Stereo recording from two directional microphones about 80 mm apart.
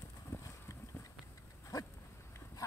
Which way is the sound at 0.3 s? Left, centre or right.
Left.